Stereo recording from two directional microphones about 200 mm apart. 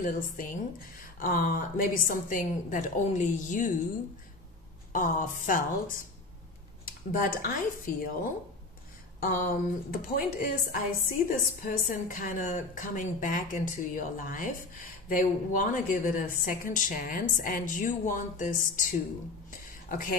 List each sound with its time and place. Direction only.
0.0 s a woman's voice: 40° left (ahead or behind)
4.9 s a woman's voice: 40° left (ahead or behind)
7.1 s a woman's voice: 45° left (ahead or behind)
19.9 s a woman's voice: 45° left (ahead or behind)